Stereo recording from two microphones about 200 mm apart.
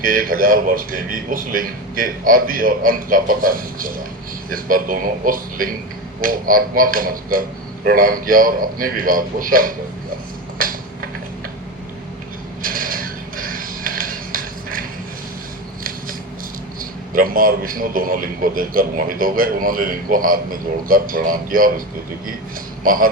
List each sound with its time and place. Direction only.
0.0 s a man's voice: 45° right (ahead or behind)
10.6 s finger snapping: 45° right (ahead or behind)
12.6 s a sound: 45° right (ahead or behind)
17.2 s a man's voice: 45° right (ahead or behind)